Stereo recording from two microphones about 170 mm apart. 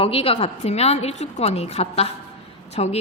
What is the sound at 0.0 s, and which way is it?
A woman's voice, 35° left (ahead or behind).